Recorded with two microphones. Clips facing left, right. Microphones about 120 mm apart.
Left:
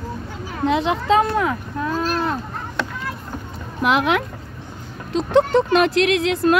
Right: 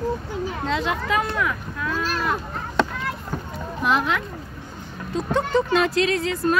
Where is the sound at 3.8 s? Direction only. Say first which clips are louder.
Left 4 dB; 70° left (ahead or behind).